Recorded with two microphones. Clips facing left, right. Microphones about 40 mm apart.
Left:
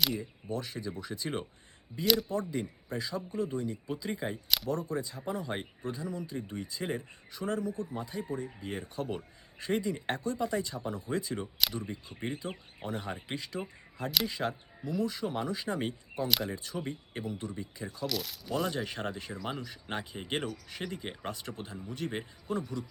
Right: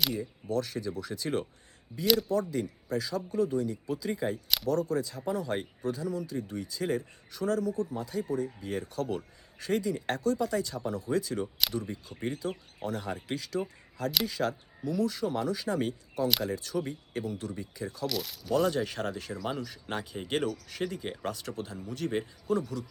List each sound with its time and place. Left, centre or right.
0.2 s speech: left
4.4 s speech: centre
4.7 s speech: left
16.2 s speech: centre
16.5 s speech: centre
18.0 s speech: centre; by 22.9 s left